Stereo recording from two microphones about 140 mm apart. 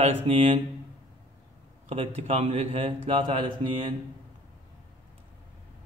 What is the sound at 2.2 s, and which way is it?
Speech, 45° right (ahead or behind).